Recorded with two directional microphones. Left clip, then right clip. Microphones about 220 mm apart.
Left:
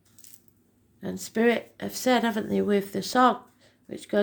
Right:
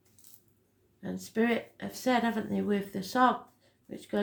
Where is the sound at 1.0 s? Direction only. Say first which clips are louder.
Left 7 dB; 45° left (ahead or behind).